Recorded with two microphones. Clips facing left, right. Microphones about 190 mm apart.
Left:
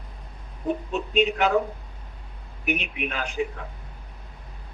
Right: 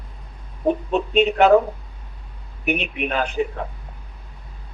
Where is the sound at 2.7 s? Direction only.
60° right (ahead or behind).